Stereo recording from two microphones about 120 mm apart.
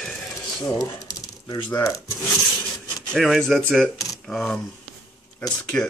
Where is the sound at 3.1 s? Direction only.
Centre (ahead or behind).